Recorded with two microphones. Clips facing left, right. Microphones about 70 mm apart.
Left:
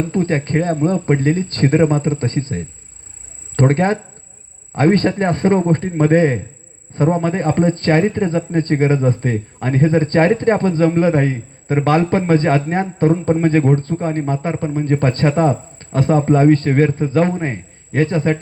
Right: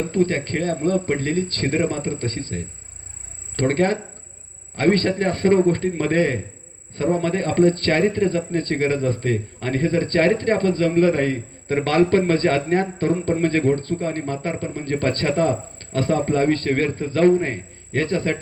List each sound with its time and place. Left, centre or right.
0.1 s speech: left
3.5 s speech: left